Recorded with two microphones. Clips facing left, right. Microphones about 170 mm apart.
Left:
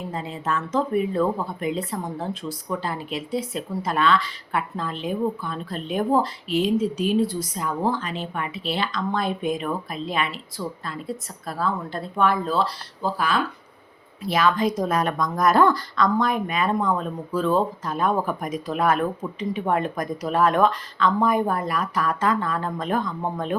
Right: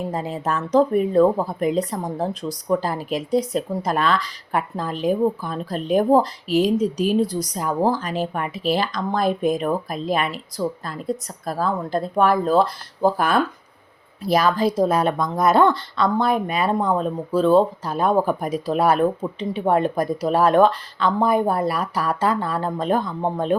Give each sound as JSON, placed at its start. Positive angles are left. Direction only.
{"t": 0.1, "sound": "speech", "side_deg": -45}
{"t": 11.4, "sound": "speech", "side_deg": -40}
{"t": 14.3, "sound": "speech", "side_deg": -40}